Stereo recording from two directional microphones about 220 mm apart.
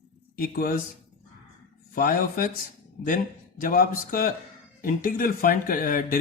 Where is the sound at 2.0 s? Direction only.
40° left (ahead or behind).